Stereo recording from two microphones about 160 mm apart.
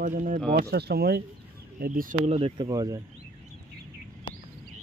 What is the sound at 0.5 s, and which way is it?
Speech, 80° right.